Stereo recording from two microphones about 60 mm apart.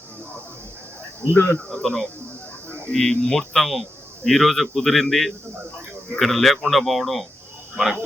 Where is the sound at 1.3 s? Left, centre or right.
Left.